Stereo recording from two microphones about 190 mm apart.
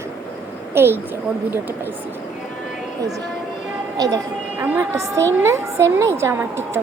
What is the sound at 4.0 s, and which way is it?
A woman's voice, 20° right (ahead or behind).